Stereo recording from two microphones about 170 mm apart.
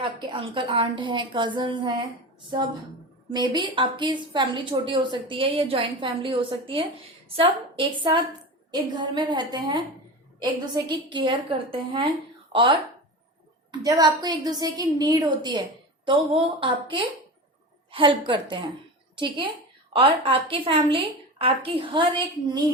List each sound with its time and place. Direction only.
0.0 s a woman's voice: 30° right (ahead or behind)
3.2 s a woman's voice: 25° right (ahead or behind)